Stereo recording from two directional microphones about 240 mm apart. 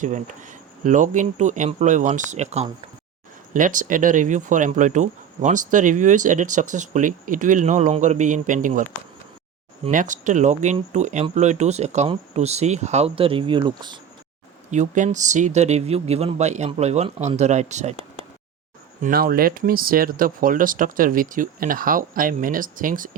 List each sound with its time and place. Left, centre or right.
0.0 s speech: right
9.8 s speech: right
14.7 s speech: right
19.0 s speech: right